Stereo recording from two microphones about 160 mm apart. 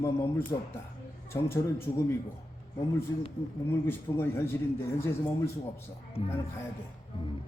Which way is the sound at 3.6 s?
15° left (ahead or behind).